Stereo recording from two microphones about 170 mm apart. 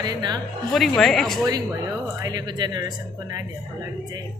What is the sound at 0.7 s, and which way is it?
Speech, centre (ahead or behind).